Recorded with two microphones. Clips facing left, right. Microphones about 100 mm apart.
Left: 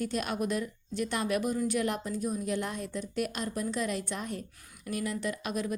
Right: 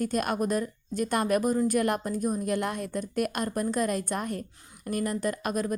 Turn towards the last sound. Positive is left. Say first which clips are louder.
# right 4 dB
turn(degrees=-45)  # may be behind; listen again after turning